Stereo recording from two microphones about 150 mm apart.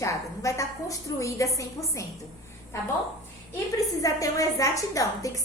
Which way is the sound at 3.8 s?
20° left (ahead or behind).